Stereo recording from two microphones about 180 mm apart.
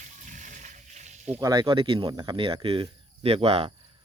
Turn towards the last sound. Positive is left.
turn(degrees=-35)  # may be behind; listen again after turning